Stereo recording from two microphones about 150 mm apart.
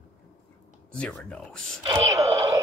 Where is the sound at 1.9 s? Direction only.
20° right (ahead or behind).